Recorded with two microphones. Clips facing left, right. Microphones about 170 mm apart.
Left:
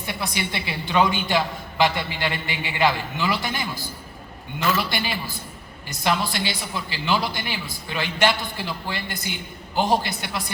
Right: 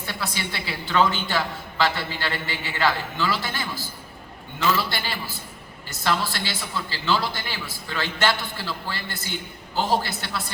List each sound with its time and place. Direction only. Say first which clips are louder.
0.0 s a woman's voice: left 2 dB; 15° left (ahead or behind)